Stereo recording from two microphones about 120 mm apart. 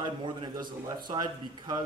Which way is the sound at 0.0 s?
40° right (ahead or behind).